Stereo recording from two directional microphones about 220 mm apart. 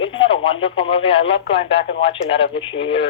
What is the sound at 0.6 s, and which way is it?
Speech, 25° left (ahead or behind).